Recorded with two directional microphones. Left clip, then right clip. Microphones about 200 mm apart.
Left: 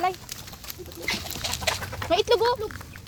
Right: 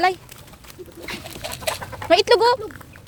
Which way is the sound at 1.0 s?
35° right (ahead or behind).